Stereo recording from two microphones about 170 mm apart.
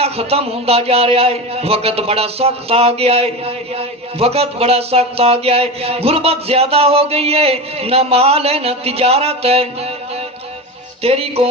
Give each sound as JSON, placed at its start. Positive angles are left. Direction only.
{"t": 0.0, "sound": "a man's voice", "side_deg": -35}
{"t": 11.0, "sound": "a man's voice", "side_deg": -35}